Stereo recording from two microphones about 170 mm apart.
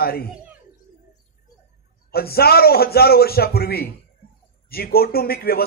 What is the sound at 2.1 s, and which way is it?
A man's voice, 65° left (ahead or behind).